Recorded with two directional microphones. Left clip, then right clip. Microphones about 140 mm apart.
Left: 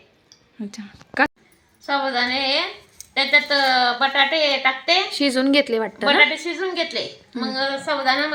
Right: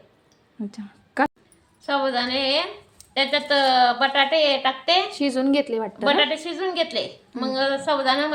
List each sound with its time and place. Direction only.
0.6 s a woman's voice: 15° right (ahead or behind)
5.1 s speech: 5° left (ahead or behind)
6.3 s a woman's voice: 15° right (ahead or behind)